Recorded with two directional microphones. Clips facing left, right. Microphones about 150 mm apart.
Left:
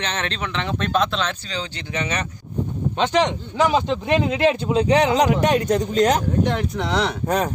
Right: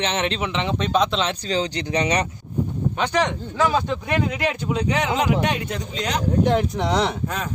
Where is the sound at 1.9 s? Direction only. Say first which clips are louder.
Right 4 dB; 20° right (ahead or behind).